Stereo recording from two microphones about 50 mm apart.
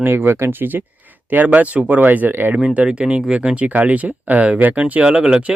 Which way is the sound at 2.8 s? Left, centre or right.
Centre.